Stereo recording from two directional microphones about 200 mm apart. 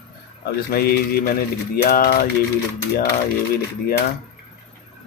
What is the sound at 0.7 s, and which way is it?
Speech, 50° left (ahead or behind).